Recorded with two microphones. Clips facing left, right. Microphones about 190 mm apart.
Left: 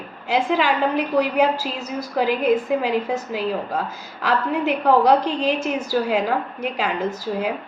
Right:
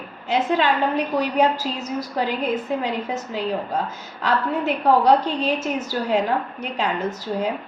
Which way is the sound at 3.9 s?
10° left (ahead or behind).